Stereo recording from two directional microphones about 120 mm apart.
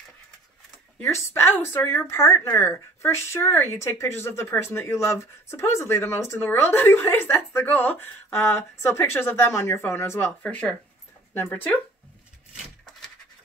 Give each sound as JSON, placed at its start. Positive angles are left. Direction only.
{"t": 1.0, "sound": "speech", "side_deg": 20}
{"t": 10.4, "sound": "speech", "side_deg": 10}